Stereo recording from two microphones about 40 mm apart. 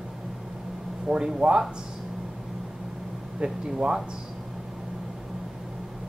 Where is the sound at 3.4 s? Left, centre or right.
Right.